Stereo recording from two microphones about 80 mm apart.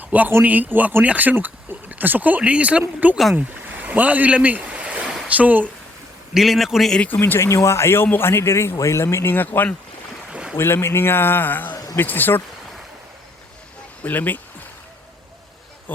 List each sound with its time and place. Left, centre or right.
0.0 s a man's voice: right
3.3 s stream: right
5.3 s speech: centre
6.3 s a man's voice: centre
7.1 s a man's voice: left
10.3 s boat: centre
10.6 s speech: left
14.0 s speech: left